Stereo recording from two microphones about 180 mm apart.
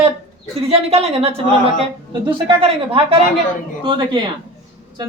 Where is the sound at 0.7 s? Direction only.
35° right (ahead or behind).